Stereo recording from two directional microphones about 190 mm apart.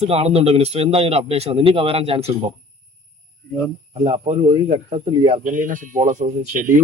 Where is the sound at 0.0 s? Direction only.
35° right (ahead or behind).